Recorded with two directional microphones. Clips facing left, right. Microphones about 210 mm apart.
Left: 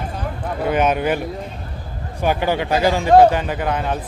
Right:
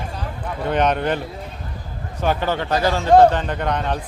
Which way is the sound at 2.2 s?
10° left (ahead or behind).